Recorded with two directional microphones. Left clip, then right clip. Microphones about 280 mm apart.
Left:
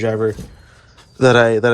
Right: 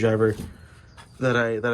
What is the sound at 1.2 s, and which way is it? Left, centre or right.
Speech, centre.